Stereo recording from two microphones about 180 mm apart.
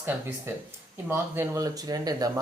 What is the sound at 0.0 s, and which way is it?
Speech, 10° right (ahead or behind).